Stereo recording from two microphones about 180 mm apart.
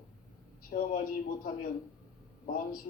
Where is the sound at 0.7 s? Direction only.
50° left (ahead or behind).